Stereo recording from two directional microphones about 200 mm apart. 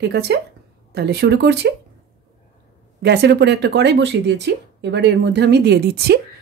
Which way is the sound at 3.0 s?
55° right (ahead or behind).